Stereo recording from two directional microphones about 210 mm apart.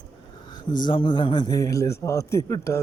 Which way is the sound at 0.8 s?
20° left (ahead or behind).